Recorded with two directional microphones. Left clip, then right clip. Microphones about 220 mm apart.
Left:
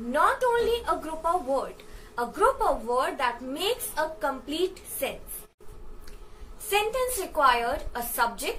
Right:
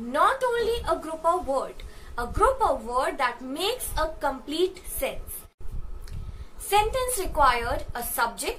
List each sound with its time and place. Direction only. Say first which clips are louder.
0.1 s a woman's voice: even; 15° right (ahead or behind)
6.7 s a woman's voice: right 3 dB; 15° right (ahead or behind)